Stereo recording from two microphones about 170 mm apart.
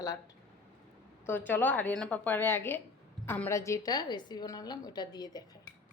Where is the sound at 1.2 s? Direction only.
10° left (ahead or behind).